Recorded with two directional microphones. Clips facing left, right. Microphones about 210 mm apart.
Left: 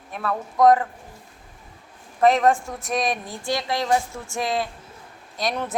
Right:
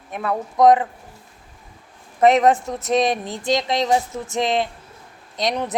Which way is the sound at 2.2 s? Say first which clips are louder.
Right 3 dB; 20° right (ahead or behind).